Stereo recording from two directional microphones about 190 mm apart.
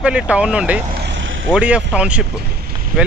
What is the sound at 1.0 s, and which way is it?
Vehicle, 80° right.